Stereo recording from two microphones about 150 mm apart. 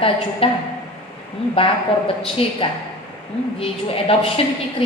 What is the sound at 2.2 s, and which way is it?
A woman's voice, 40° left (ahead or behind).